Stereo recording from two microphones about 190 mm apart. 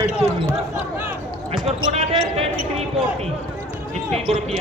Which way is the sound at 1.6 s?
35° right (ahead or behind).